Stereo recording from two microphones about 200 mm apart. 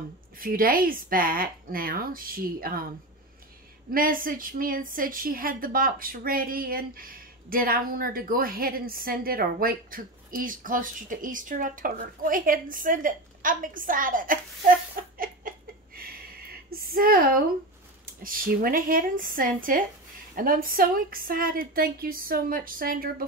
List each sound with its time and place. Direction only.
0.4 s a woman's voice: 45° right (ahead or behind)
3.9 s a woman's voice: 45° right (ahead or behind)
15.1 s a sound: 45° right (ahead or behind)
16.7 s a woman's voice: 45° right (ahead or behind)